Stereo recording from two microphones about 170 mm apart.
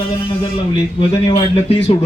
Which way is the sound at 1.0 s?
30° left (ahead or behind).